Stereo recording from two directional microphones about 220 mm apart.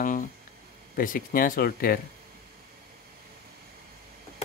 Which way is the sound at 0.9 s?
40° left (ahead or behind).